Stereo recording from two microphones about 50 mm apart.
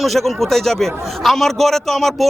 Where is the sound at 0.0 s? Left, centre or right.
Centre.